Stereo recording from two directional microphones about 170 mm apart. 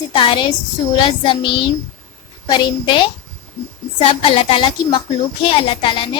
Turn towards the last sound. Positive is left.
turn(degrees=30)  # may be behind; listen again after turning